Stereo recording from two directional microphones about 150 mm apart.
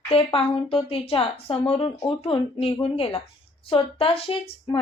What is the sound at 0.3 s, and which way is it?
A woman's voice, 40° left (ahead or behind).